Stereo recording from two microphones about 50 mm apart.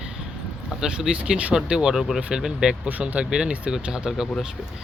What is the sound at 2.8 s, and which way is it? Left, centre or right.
Speech, right.